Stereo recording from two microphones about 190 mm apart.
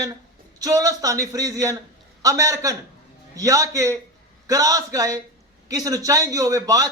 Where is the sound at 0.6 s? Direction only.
20° right (ahead or behind).